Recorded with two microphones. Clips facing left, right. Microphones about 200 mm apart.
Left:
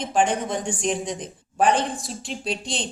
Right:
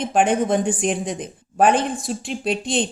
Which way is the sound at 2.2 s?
55° right (ahead or behind).